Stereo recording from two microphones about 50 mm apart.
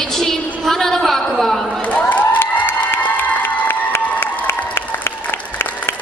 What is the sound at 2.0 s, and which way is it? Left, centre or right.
Crowd, left.